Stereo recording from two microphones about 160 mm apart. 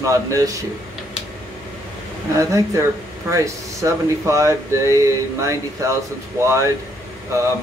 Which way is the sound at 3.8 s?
20° right (ahead or behind).